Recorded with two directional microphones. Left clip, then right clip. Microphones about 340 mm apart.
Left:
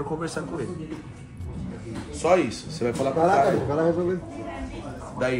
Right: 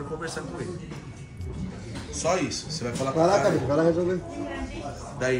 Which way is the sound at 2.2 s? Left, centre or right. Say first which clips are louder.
Left 5 dB; centre.